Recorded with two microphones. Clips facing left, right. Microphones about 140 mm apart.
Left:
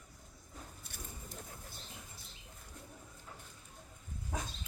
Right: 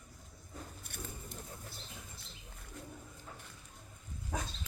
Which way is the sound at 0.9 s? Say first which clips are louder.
Right 4 dB; 60° right (ahead or behind).